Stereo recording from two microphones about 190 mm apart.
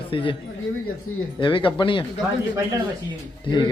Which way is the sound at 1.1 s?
90° left.